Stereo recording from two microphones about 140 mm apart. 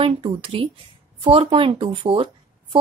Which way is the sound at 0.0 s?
40° right (ahead or behind).